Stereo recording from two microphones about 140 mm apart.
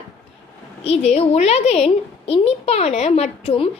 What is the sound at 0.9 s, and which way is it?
A woman's voice, 50° left (ahead or behind).